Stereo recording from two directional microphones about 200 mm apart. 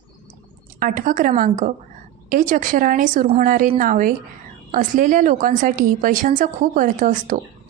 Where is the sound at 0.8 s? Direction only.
40° right (ahead or behind).